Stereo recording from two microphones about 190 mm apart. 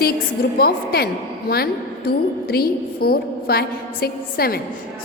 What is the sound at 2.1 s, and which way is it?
A woman's voice, 55° left (ahead or behind).